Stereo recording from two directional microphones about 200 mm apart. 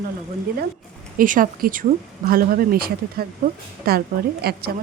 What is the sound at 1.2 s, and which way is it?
A woman's voice, 45° right (ahead or behind).